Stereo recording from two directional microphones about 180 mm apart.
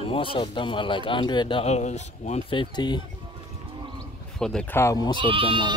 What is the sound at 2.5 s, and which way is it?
Speech, 25° left (ahead or behind).